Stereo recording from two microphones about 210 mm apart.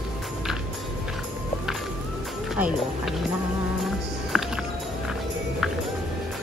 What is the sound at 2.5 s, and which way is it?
Speech, 5° right (ahead or behind).